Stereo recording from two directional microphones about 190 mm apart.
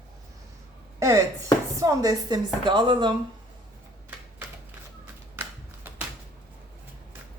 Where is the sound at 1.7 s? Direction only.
15° right (ahead or behind).